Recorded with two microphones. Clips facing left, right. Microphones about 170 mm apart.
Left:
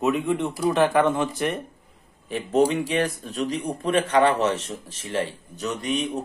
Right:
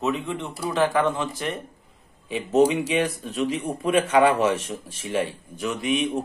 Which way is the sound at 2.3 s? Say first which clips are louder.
Right 1 dB; 5° right (ahead or behind).